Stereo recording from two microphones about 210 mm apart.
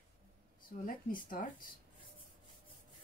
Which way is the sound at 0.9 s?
40° left (ahead or behind).